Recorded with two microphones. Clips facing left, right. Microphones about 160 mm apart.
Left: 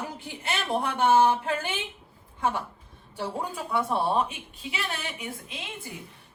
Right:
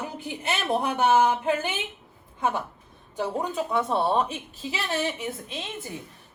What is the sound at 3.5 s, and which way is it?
A woman's voice, 25° right (ahead or behind).